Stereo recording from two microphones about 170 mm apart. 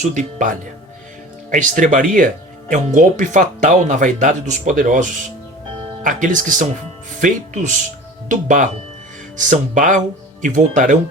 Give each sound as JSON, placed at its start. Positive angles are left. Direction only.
{"t": 0.0, "sound": "speech", "side_deg": -45}